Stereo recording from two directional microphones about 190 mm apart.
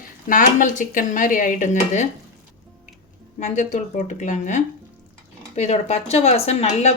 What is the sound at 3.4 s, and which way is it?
Speech, 40° left (ahead or behind).